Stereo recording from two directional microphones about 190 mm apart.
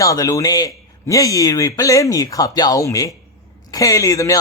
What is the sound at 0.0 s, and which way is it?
Speech, 15° left (ahead or behind).